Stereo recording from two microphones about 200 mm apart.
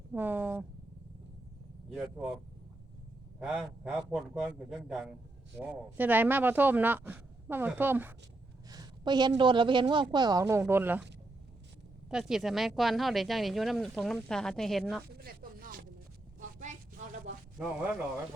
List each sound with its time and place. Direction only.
0.1 s speech: 10° right (ahead or behind)
1.9 s speech: centre (ahead or behind)
3.4 s speech: 5° right (ahead or behind)
8.7 s a sound: 20° right (ahead or behind)
9.4 s speech: 25° right (ahead or behind)
12.1 s speech: centre (ahead or behind)
15.0 s a sound: 50° right (ahead or behind)
16.4 s vehicle: 40° right (ahead or behind)